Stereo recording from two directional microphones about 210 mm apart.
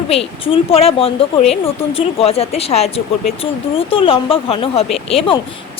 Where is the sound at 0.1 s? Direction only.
25° left (ahead or behind).